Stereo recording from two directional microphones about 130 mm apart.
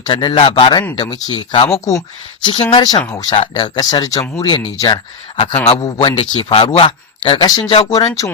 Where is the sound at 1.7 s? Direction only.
25° left (ahead or behind).